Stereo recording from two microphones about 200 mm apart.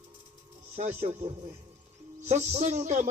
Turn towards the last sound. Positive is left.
turn(degrees=-35)  # may be behind; listen again after turning